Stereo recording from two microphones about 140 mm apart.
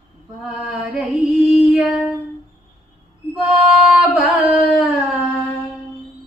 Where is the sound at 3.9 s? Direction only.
5° right (ahead or behind).